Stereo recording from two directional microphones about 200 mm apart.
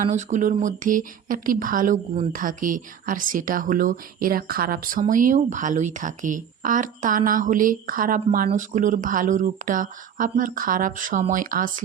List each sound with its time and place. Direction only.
0.0 s speech: 35° right (ahead or behind)